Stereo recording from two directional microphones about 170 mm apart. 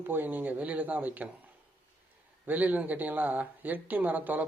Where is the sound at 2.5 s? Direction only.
10° right (ahead or behind).